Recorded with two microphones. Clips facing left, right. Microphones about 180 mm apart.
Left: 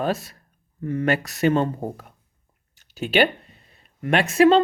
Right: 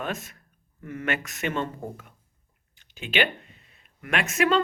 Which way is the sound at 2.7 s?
40° left (ahead or behind).